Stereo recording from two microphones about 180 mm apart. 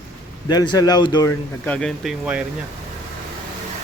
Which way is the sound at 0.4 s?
25° left (ahead or behind).